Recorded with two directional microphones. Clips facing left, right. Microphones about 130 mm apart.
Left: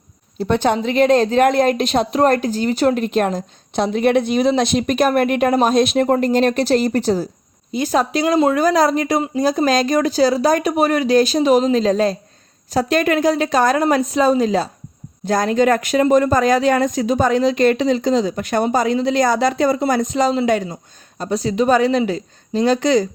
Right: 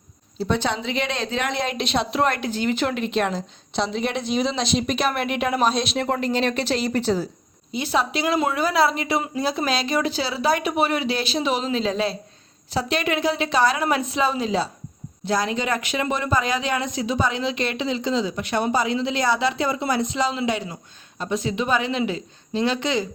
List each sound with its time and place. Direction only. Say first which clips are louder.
0.3 s speech: left 6 dB; 55° left (ahead or behind)